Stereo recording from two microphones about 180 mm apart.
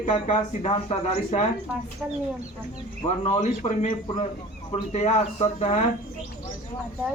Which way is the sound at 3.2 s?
40° left (ahead or behind).